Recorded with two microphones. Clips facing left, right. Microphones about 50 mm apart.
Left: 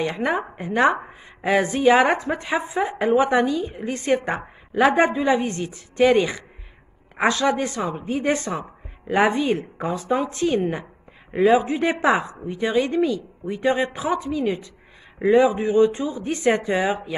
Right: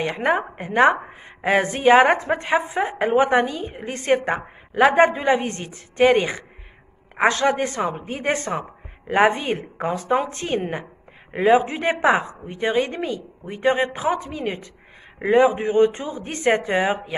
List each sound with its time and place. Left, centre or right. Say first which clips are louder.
0.1 s a woman's voice: right 2 dB; right
4.3 s a woman's voice: right 2 dB; right
11.6 s a woman's voice: right 1 dB; right